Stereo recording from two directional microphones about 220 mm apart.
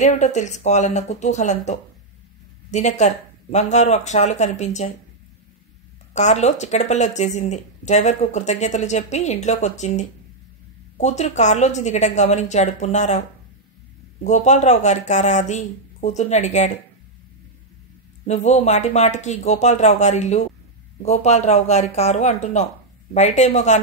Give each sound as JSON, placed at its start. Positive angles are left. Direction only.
{"t": 0.0, "sound": "speech", "side_deg": 35}
{"t": 6.1, "sound": "speech", "side_deg": 30}
{"t": 14.2, "sound": "speech", "side_deg": 30}
{"t": 18.2, "sound": "speech", "side_deg": 30}